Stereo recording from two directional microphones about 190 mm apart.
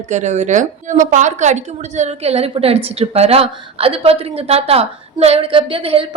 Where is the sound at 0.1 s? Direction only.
40° right (ahead or behind).